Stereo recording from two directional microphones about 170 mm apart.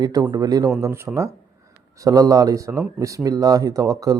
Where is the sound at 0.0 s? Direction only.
20° right (ahead or behind).